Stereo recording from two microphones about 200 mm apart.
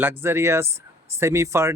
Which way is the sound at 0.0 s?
10° right (ahead or behind).